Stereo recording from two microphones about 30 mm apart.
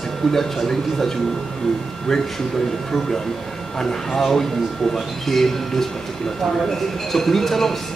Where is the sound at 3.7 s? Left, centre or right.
Centre.